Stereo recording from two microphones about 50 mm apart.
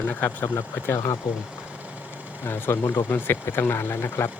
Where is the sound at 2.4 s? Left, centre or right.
Left.